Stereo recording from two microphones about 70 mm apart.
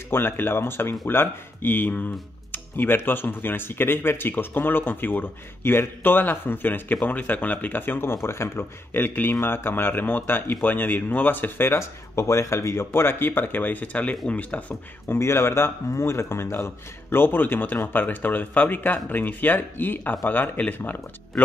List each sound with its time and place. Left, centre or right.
0.1 s speech: left
15.0 s speech: left